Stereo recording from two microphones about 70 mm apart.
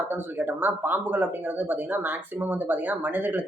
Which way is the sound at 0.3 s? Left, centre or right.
Right.